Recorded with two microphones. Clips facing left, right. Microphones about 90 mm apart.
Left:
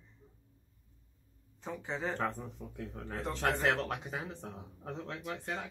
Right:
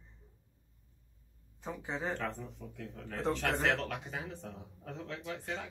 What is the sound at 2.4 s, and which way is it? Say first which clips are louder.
Speech: left 2 dB; 30° left (ahead or behind).